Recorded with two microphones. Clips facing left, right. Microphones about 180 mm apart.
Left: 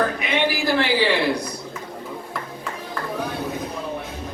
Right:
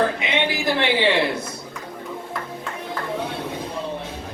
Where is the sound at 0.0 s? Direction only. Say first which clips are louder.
Even; 25° right (ahead or behind).